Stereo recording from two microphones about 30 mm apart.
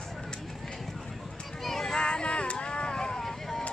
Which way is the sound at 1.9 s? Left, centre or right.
Left.